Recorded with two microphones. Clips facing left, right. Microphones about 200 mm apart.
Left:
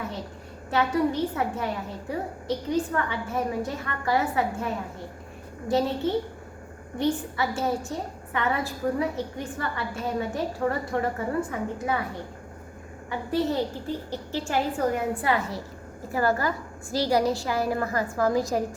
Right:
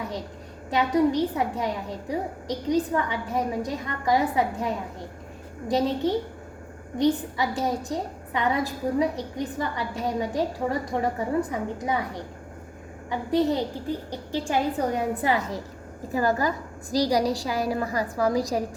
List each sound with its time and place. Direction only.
0.7 s a woman's voice: 15° right (ahead or behind)
13.1 s a woman's voice: 15° right (ahead or behind)